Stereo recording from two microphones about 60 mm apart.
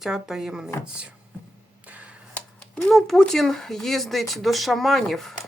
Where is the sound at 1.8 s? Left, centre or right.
Right.